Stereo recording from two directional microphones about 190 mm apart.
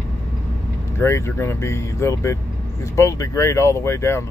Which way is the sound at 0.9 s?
15° left (ahead or behind).